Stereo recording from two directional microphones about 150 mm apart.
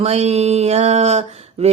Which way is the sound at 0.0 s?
45° right (ahead or behind).